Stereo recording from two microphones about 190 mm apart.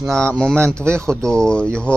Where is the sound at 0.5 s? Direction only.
15° right (ahead or behind).